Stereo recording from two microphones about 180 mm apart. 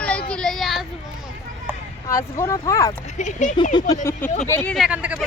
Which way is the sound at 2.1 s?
15° left (ahead or behind).